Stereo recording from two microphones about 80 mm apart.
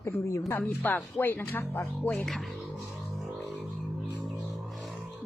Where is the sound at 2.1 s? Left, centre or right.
Centre.